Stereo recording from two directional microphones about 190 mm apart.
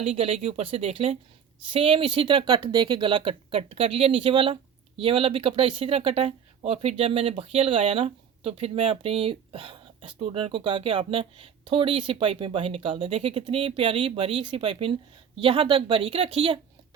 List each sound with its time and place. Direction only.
0.0 s speech: 30° right (ahead or behind)